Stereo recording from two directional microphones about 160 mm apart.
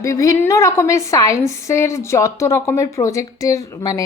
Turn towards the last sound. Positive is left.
turn(degrees=20)  # may be behind; listen again after turning